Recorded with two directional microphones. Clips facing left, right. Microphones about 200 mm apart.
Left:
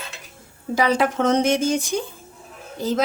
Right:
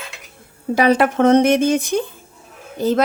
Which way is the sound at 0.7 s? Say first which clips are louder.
Right 5 dB; 60° right (ahead or behind).